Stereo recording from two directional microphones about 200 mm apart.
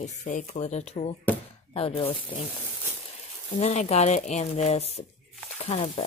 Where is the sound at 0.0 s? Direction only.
35° left (ahead or behind).